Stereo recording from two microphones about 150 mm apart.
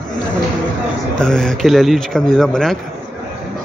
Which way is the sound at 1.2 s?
5° left (ahead or behind).